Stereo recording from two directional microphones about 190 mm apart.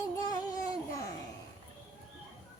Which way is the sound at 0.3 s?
20° left (ahead or behind).